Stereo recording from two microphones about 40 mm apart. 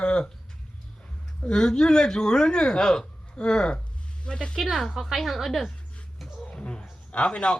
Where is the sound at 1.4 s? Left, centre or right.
Centre.